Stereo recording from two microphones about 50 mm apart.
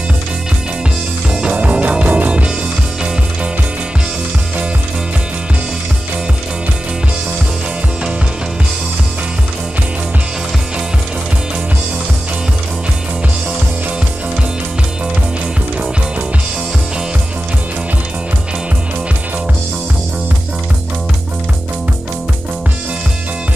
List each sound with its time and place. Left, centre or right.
1.3 s music: right